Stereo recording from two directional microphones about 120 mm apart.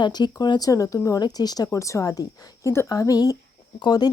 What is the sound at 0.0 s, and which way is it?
Speech, 35° left (ahead or behind).